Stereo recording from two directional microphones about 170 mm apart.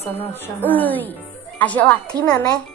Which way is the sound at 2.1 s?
20° right (ahead or behind).